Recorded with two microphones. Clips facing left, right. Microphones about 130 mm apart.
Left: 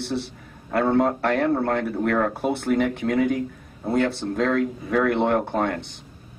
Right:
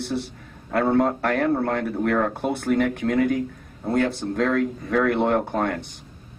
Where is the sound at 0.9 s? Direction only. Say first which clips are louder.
Left 1 dB; centre (ahead or behind).